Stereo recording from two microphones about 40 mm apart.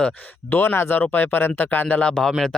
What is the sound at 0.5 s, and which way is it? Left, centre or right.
Speech, left.